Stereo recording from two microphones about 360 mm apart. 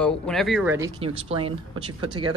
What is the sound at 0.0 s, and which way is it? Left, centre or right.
Speech, centre.